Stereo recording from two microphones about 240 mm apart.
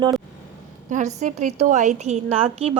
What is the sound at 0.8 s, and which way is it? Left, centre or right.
A woman's voice, right.